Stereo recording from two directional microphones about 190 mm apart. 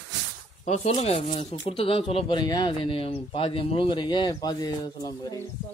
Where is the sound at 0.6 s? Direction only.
35° left (ahead or behind); by 5.4 s 20° left (ahead or behind).